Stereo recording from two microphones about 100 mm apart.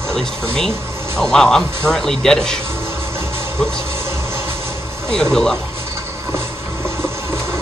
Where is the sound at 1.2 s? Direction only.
5° left (ahead or behind).